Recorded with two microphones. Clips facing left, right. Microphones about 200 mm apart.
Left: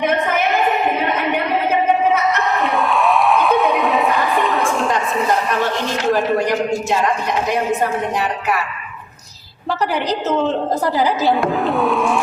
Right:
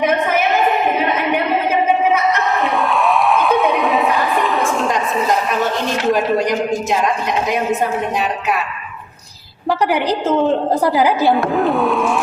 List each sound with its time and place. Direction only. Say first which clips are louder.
2.6 s music: even; centre (ahead or behind)
6.1 s a woman's voice: right 1 dB; 15° right (ahead or behind)
9.6 s a woman's voice: right 3 dB; 10° right (ahead or behind)
11.3 s a sound: right 2 dB; centre (ahead or behind)